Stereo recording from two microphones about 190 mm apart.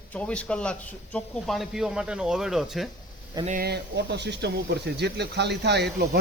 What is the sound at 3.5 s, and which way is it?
Speech, 50° right (ahead or behind).